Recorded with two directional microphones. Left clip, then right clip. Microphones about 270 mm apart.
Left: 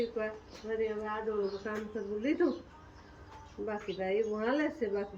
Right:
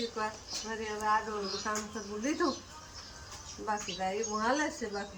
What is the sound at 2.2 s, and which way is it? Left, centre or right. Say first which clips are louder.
Speech: left 1 dB; centre.